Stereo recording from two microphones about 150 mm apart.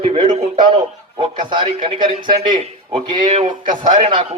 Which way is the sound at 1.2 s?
30° right (ahead or behind).